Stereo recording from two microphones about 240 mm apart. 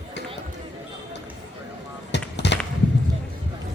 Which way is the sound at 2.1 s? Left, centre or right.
Left.